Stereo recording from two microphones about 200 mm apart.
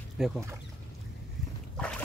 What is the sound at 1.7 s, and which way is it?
Boat, 5° left (ahead or behind).